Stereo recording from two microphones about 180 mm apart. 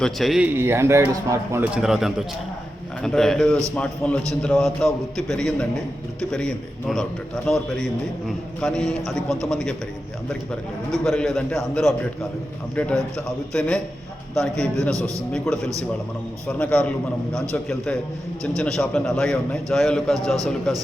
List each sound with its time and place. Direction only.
0.0 s a man's voice: centre (ahead or behind)
10.9 s a man's voice: 5° left (ahead or behind)
14.8 s speech: 15° right (ahead or behind)
15.3 s a man's voice: centre (ahead or behind)